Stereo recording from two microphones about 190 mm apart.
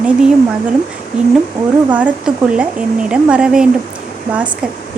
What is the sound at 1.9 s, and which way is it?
Speech, 10° right (ahead or behind).